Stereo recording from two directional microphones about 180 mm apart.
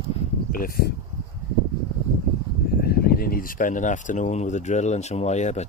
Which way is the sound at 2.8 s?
55° left (ahead or behind).